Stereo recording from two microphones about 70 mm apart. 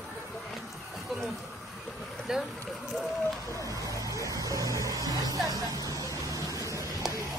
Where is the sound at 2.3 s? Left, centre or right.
Centre.